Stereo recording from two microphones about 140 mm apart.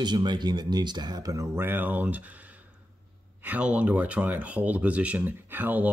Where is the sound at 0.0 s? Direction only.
30° right (ahead or behind); by 2.3 s 10° right (ahead or behind).